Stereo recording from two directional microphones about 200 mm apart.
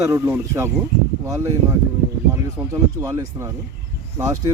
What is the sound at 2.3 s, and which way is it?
Speech, 15° right (ahead or behind).